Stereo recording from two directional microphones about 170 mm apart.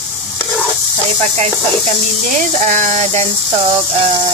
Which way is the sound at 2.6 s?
45° right (ahead or behind).